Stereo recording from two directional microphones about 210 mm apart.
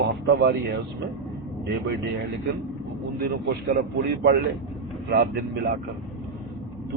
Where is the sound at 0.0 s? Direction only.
55° right (ahead or behind).